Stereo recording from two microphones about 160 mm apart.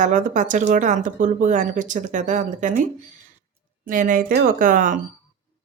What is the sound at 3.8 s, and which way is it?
Speech, 60° right (ahead or behind).